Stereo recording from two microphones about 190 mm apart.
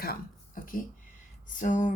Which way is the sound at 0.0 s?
50° left (ahead or behind).